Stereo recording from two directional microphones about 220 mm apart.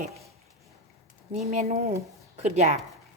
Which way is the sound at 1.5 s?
30° right (ahead or behind).